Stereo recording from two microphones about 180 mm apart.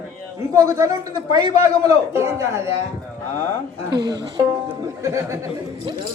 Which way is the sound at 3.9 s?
20° right (ahead or behind).